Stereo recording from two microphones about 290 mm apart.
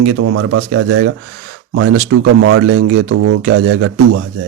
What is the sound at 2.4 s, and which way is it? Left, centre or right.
A man's voice, right.